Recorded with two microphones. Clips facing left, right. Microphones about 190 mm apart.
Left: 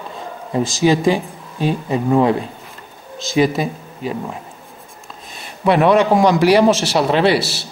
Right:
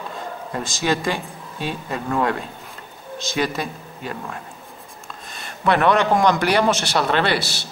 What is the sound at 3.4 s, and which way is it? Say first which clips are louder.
Speech: left 8 dB; 5° left (ahead or behind).